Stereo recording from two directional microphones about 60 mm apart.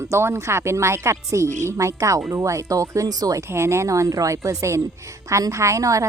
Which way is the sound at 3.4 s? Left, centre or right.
Right.